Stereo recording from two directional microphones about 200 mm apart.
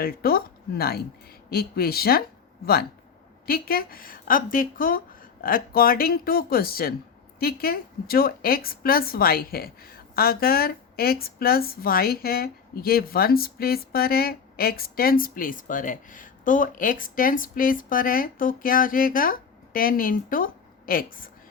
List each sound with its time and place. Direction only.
0.0 s a woman's voice: 50° left (ahead or behind)
3.4 s a woman's voice: 50° left (ahead or behind)